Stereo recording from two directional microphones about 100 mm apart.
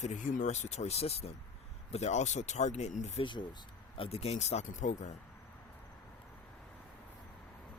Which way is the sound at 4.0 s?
85° left.